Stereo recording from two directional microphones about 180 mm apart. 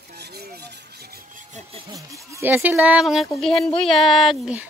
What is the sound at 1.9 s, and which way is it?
Speech, 20° right (ahead or behind).